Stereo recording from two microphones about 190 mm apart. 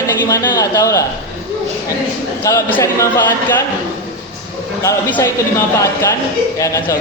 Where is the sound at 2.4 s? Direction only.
15° left (ahead or behind).